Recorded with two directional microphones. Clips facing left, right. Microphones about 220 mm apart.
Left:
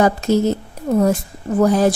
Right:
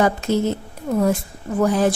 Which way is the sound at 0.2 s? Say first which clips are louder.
Left 4 dB; 40° left (ahead or behind).